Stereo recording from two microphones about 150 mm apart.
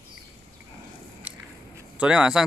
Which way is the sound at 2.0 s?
5° right (ahead or behind).